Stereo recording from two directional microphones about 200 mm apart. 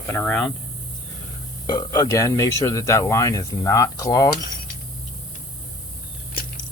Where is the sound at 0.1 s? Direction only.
10° left (ahead or behind).